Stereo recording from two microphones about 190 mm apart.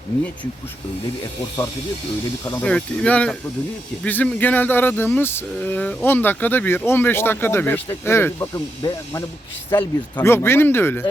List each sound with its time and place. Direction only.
2.4 s speech: 15° left (ahead or behind)
2.6 s speech: 5° left (ahead or behind)